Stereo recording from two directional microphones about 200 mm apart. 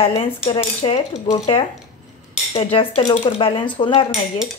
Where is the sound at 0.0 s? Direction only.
25° left (ahead or behind).